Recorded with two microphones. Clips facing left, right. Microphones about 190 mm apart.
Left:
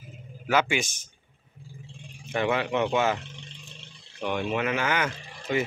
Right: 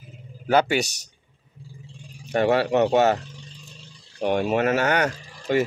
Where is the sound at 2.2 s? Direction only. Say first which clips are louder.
Right 6 dB; 40° right (ahead or behind).